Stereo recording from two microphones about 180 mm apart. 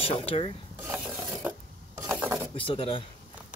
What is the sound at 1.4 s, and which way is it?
Filing, 10° right (ahead or behind).